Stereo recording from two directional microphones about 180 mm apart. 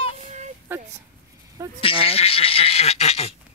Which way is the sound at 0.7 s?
10° right (ahead or behind).